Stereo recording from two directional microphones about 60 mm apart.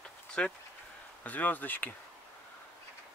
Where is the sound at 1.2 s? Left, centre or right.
Left.